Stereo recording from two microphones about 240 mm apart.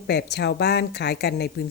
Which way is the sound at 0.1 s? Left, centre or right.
Left.